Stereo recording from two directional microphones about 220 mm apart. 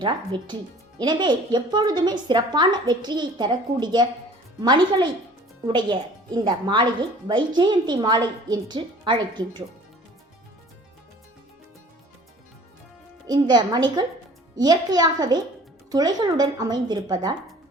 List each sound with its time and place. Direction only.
0.0 s speech: 20° right (ahead or behind)
13.3 s speech: 20° right (ahead or behind)